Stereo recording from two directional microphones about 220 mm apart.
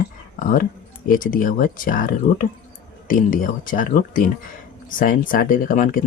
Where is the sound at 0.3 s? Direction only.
35° left (ahead or behind).